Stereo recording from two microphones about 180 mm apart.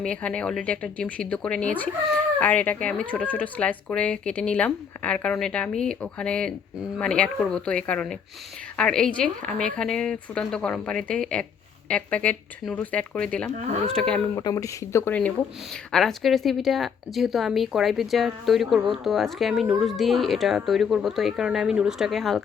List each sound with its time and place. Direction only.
0.0 s speech: 5° left (ahead or behind)
13.5 s speech: 40° right (ahead or behind)
13.9 s speech: 5° left (ahead or behind)
14.3 s speech: 20° left (ahead or behind); by 22.4 s centre (ahead or behind)